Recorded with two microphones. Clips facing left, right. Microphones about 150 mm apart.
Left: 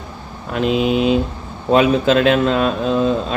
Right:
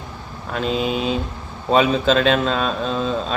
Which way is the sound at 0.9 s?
70° left (ahead or behind).